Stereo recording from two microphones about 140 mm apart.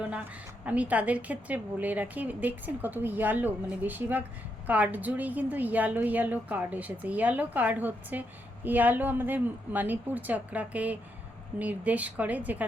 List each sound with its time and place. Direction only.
0.6 s a woman's voice: 10° right (ahead or behind)